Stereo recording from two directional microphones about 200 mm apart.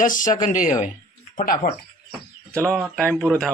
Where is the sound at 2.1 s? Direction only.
5° left (ahead or behind).